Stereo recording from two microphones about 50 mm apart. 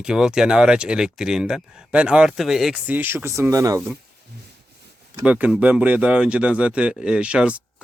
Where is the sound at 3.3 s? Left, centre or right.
Right.